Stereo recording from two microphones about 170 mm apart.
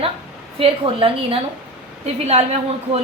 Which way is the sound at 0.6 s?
35° right (ahead or behind).